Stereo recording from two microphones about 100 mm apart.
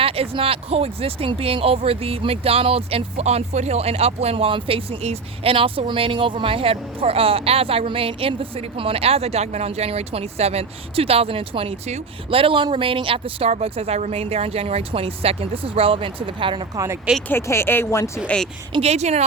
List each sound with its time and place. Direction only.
0.0 s speech: 75° right (ahead or behind); by 16.6 s 60° right (ahead or behind)
16.7 s speech: 35° right (ahead or behind)
17.2 s speech: 25° left (ahead or behind)
18.8 s speech: 90° right